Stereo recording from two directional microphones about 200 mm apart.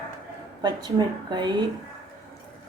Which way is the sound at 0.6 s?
20° right (ahead or behind).